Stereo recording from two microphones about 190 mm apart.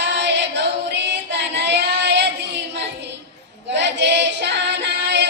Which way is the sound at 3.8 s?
65° right (ahead or behind).